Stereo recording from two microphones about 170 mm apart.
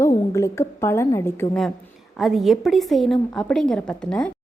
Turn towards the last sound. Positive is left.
turn(degrees=5)  # may be behind; listen again after turning